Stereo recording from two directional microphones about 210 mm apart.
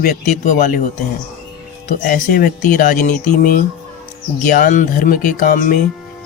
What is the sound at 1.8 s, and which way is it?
Speech, 45° left (ahead or behind).